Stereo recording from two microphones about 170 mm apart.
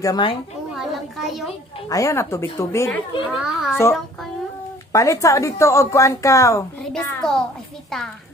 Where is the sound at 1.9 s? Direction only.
20° left (ahead or behind).